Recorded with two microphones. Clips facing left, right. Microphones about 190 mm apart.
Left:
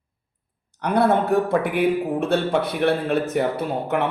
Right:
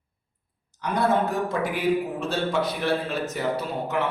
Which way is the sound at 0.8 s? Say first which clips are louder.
Left 4 dB; 60° left (ahead or behind).